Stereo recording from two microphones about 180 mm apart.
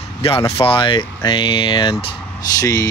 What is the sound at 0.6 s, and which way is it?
Speech, 25° left (ahead or behind).